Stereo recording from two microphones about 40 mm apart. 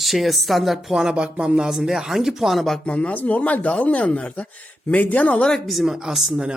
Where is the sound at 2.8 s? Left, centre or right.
Left.